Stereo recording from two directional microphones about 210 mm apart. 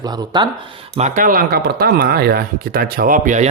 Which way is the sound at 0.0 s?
20° right (ahead or behind).